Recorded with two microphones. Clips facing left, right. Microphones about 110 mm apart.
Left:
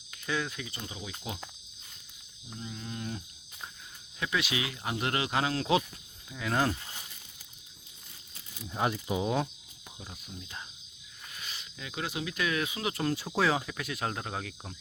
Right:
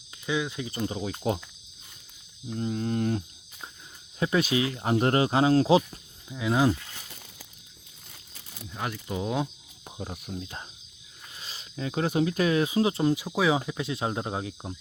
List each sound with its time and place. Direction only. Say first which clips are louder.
0.3 s speech: right 4 dB; 15° right (ahead or behind)
0.9 s cricket: right 12 dB; 40° right (ahead or behind)
2.6 s cricket: right 12 dB; 50° right (ahead or behind)
4.2 s speech: right 7 dB; 35° right (ahead or behind)
6.2 s speech: right 5 dB; 10° right (ahead or behind)
8.7 s speech: left 4 dB; 25° left (ahead or behind)
9.0 s speech: even; 5° left (ahead or behind)
10.0 s cricket: right 10 dB; 55° right (ahead or behind)
11.3 s speech: right 8 dB; 35° right (ahead or behind)
13.0 s speech: right 4 dB; 15° right (ahead or behind)